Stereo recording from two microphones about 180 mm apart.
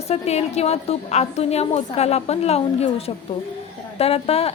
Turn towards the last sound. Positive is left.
turn(degrees=35)  # may be behind; listen again after turning